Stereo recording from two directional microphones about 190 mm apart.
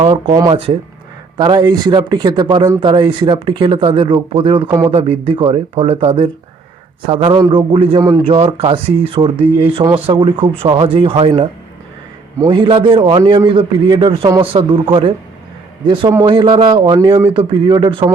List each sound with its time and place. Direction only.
0.0 s speech: 30° right (ahead or behind)
0.3 s a man's voice: 20° right (ahead or behind)